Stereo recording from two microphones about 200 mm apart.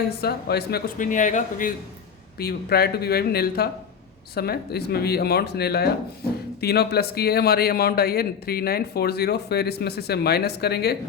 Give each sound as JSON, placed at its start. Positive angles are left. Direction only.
{"t": 0.2, "sound": "a man's voice", "side_deg": 50}
{"t": 2.4, "sound": "a man's voice", "side_deg": 50}